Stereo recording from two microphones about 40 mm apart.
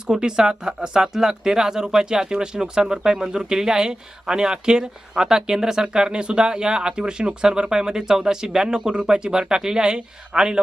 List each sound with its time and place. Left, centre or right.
0.1 s speech: centre